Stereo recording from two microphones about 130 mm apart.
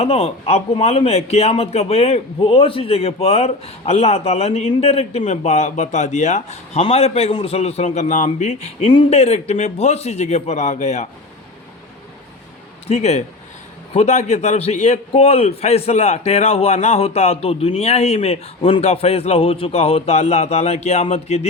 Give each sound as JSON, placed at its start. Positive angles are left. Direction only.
{"t": 0.0, "sound": "a man's voice", "side_deg": 50}
{"t": 6.8, "sound": "a man's voice", "side_deg": 50}
{"t": 12.9, "sound": "a man's voice", "side_deg": 60}